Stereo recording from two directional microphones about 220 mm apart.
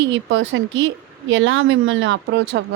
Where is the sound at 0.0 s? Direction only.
60° right (ahead or behind).